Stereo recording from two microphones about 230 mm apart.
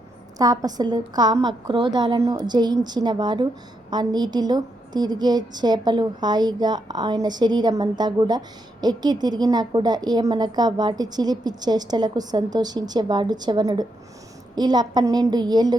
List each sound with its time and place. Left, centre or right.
0.3 s a woman's voice: centre